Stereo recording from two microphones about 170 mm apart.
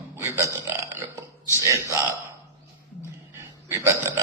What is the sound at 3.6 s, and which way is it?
Burping, 15° right (ahead or behind).